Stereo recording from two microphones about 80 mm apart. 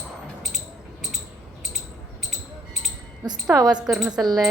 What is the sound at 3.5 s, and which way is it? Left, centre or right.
Speech, right.